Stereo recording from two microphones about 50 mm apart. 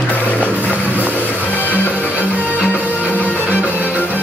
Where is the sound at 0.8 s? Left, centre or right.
Left.